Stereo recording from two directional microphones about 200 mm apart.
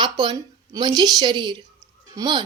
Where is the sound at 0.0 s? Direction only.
20° right (ahead or behind).